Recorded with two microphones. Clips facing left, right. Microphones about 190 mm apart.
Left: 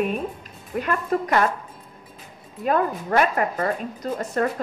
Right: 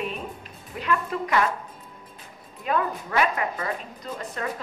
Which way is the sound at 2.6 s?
45° left (ahead or behind).